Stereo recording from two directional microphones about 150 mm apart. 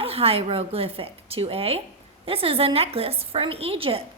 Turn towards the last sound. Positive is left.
turn(degrees=-40)  # may be behind; listen again after turning